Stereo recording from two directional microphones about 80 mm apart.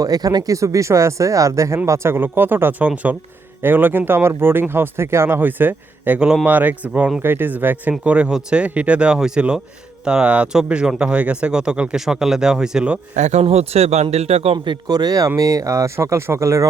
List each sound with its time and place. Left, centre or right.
0.0 s speech: right
6.1 s speech: centre
6.4 s speech: right
14.5 s a man's voice: right
14.8 s speech: right